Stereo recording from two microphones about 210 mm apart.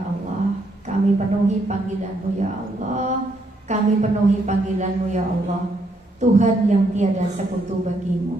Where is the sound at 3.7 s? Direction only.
35° right (ahead or behind).